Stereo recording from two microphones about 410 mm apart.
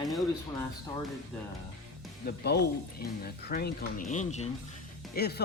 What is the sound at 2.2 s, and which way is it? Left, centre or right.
Speech, left.